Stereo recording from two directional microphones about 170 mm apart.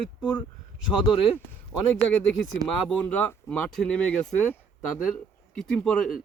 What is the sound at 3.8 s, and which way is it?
Speech, 5° left (ahead or behind).